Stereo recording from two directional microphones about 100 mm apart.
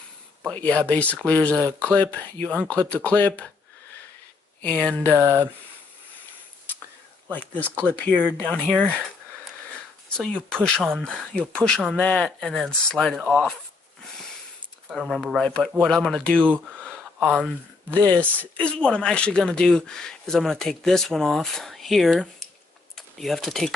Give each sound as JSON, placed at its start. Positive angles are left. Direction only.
{"t": 0.5, "sound": "speech", "side_deg": 15}
{"t": 4.6, "sound": "speech", "side_deg": 10}
{"t": 5.2, "sound": "speech", "side_deg": -30}
{"t": 7.2, "sound": "speech", "side_deg": 15}
{"t": 10.0, "sound": "speech", "side_deg": 10}
{"t": 10.8, "sound": "speech", "side_deg": -5}
{"t": 11.1, "sound": "speech", "side_deg": 10}
{"t": 14.9, "sound": "speech", "side_deg": -5}
{"t": 15.4, "sound": "speech", "side_deg": 10}
{"t": 16.5, "sound": "a sound", "side_deg": 5}
{"t": 17.9, "sound": "speech", "side_deg": 10}